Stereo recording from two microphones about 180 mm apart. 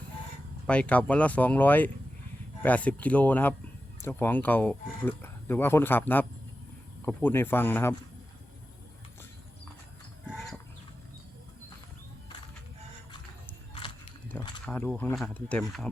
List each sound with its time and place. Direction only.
0.7 s speech: 5° left (ahead or behind)
14.6 s speech: 5° left (ahead or behind)